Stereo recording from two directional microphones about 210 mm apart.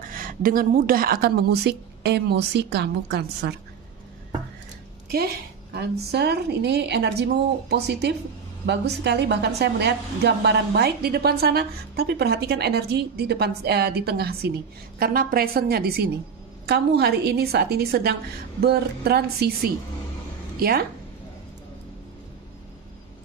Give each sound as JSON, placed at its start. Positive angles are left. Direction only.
{"t": 0.1, "sound": "a woman's voice", "side_deg": -40}
{"t": 5.1, "sound": "a woman's voice", "side_deg": -50}